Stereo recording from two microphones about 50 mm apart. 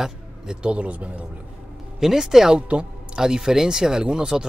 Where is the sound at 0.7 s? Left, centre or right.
Right.